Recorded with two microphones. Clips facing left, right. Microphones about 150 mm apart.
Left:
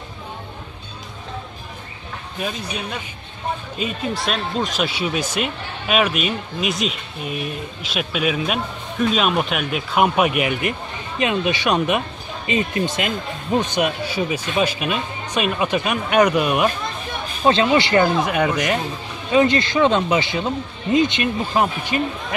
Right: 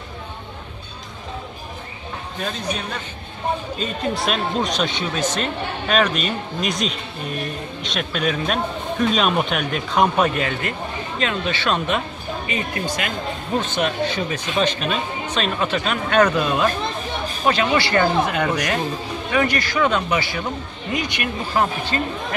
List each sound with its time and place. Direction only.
3.7 s speech: 5° left (ahead or behind)